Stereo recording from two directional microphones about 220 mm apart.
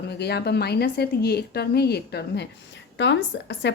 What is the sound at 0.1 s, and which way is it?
A woman's voice, 50° left (ahead or behind).